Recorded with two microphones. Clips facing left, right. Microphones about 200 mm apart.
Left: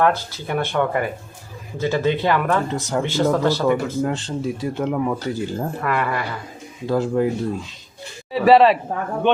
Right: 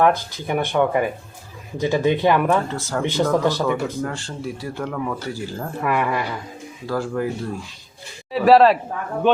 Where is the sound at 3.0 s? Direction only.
15° right (ahead or behind).